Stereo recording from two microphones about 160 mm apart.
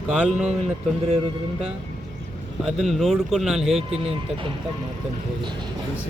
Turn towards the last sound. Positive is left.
turn(degrees=-35)  # may be behind; listen again after turning